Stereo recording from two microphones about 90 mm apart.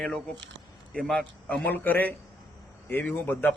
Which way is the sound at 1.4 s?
15° left (ahead or behind).